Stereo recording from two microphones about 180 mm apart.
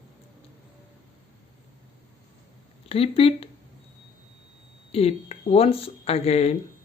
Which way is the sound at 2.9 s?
30° left (ahead or behind).